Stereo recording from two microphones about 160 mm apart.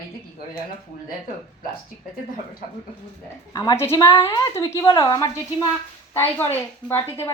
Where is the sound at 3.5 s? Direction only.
25° left (ahead or behind).